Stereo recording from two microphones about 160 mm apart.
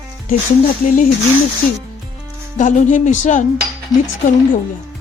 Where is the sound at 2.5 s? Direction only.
50° left (ahead or behind).